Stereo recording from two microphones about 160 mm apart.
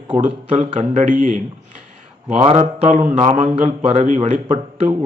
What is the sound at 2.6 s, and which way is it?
Speech, 50° right (ahead or behind).